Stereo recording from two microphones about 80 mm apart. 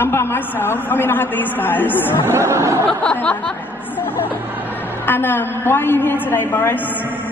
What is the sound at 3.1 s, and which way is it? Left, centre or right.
Speech, left.